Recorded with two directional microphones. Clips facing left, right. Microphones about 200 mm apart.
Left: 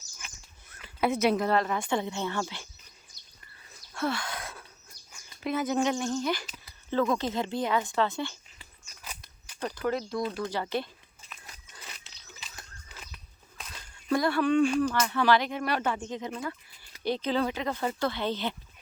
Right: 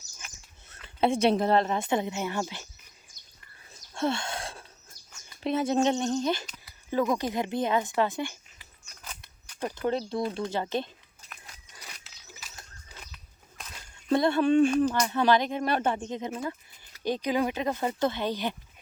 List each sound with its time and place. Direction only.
0.7 s speech: 30° right (ahead or behind)
3.9 s a sound: 25° right (ahead or behind)
5.4 s speech: 30° right (ahead or behind)
9.0 s a sound: 10° left (ahead or behind)
9.6 s speech: 20° right (ahead or behind)
14.1 s speech: 25° right (ahead or behind)